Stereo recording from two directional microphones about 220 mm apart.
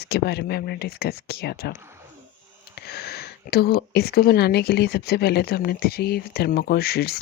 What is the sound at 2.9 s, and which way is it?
Speech, 45° left (ahead or behind).